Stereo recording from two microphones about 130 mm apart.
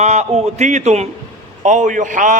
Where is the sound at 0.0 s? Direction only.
60° right (ahead or behind).